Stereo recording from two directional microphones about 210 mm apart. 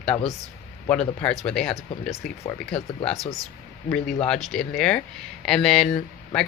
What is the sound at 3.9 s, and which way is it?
Speech, 5° left (ahead or behind).